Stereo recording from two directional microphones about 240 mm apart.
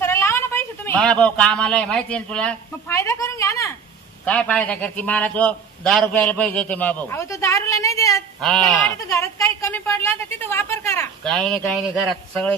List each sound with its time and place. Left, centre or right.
0.0 s a woman's voice: centre
8.4 s speech: centre
8.9 s a man's voice: centre